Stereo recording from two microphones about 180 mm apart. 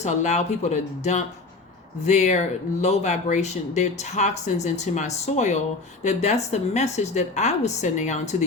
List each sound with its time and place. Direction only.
0.0 s speech: 40° left (ahead or behind)